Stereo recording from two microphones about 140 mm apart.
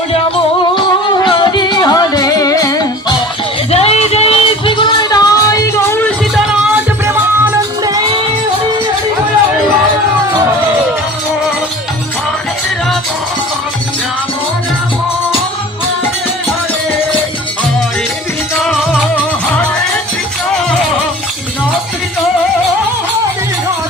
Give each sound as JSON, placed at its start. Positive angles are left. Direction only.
{"t": 0.8, "sound": "music", "side_deg": 35}
{"t": 3.7, "sound": "music", "side_deg": 45}